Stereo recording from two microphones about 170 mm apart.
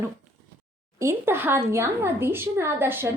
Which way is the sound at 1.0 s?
15° right (ahead or behind).